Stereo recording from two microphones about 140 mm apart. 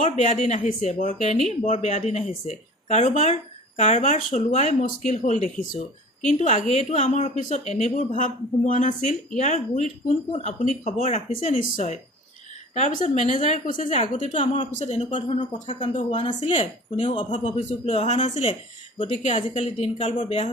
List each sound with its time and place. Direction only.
0.0 s speech: 65° left (ahead or behind)
15.0 s speech: 40° left (ahead or behind)
17.8 s a woman's voice: 55° left (ahead or behind)